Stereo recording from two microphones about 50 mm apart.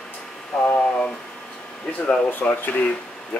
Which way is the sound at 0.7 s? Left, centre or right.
Left.